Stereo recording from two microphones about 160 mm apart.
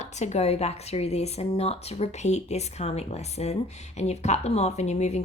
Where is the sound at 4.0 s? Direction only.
45° left (ahead or behind).